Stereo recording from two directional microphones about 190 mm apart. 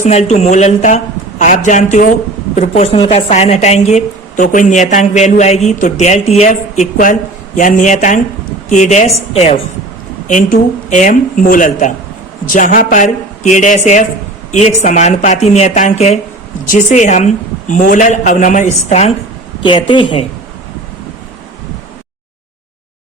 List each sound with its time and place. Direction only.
0.0 s a woman's voice: 35° left (ahead or behind)
19.6 s speech: 25° left (ahead or behind)